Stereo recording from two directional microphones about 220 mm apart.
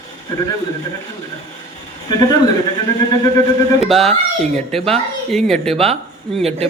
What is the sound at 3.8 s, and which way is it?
Speech, centre (ahead or behind).